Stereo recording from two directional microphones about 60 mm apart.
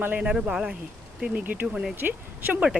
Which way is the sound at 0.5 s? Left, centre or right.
Centre.